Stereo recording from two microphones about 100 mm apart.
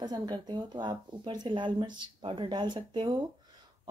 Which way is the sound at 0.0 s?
45° right (ahead or behind).